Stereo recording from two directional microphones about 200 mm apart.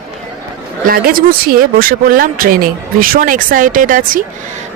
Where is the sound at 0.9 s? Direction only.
45° right (ahead or behind).